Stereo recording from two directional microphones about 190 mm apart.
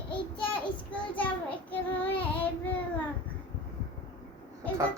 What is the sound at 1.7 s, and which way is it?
Child singing, 10° left (ahead or behind).